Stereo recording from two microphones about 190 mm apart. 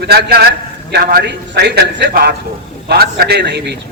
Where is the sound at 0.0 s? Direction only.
55° right (ahead or behind).